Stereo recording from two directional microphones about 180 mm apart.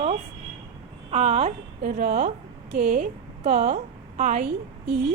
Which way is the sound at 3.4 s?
35° right (ahead or behind).